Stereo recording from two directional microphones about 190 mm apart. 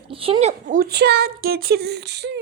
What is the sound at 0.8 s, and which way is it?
Speech, 55° right (ahead or behind).